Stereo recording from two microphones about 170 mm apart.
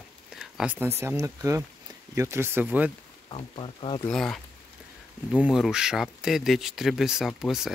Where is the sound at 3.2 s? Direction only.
30° left (ahead or behind).